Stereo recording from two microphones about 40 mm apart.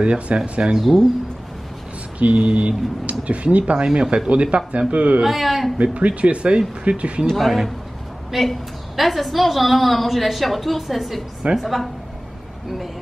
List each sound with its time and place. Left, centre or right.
0.0 s speech: right
0.7 s a woman's voice: centre
2.1 s speech: right
3.7 s speech: right
5.2 s a woman's voice: centre
5.8 s speech: right
7.2 s a woman's voice: centre